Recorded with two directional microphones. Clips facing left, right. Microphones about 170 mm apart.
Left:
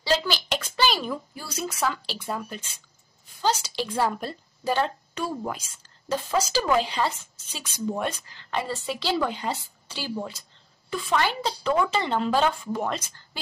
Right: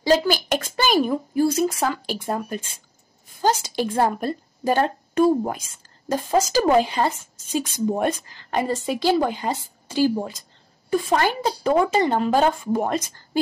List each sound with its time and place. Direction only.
0.0 s speech: 45° right (ahead or behind)